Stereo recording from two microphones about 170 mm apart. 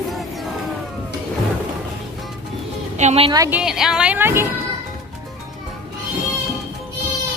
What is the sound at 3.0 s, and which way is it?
Speech, 40° right (ahead or behind).